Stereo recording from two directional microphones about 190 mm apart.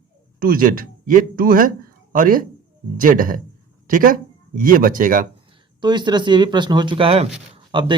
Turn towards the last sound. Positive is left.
turn(degrees=-25)  # may be behind; listen again after turning